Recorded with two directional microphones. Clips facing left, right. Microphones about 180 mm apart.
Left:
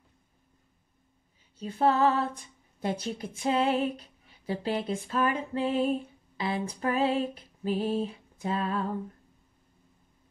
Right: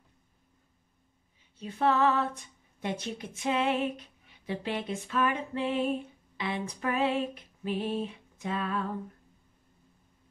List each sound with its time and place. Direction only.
1.6 s speech: 35° left (ahead or behind)